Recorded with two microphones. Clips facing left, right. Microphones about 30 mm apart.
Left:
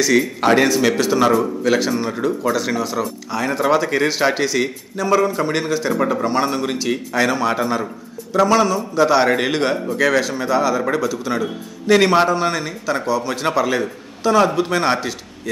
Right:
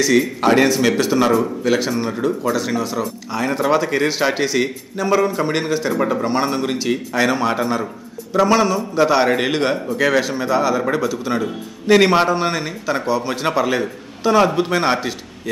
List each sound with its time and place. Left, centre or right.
0.0 s a man's voice: centre
8.3 s a man's voice: centre
9.2 s a man's voice: centre; by 13.3 s right
13.3 s a man's voice: centre
14.7 s a man's voice: centre